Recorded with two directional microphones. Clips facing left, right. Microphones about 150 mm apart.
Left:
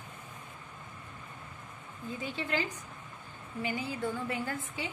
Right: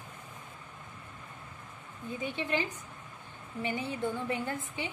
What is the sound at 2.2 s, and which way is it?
A woman's voice, 20° right (ahead or behind).